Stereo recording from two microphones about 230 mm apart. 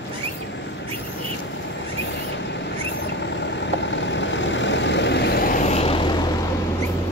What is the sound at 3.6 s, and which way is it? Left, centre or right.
Vehicle, left.